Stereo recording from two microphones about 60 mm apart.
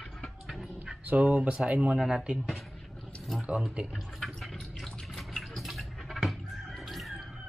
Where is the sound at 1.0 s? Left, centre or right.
Right.